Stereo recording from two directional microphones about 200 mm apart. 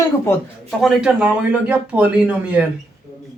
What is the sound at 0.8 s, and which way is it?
Speech, centre (ahead or behind).